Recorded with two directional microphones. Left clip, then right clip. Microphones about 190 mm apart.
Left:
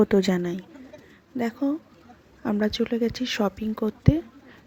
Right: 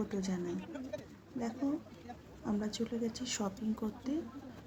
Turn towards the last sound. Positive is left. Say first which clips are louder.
# left 13 dB
turn(degrees=35)  # may be behind; listen again after turning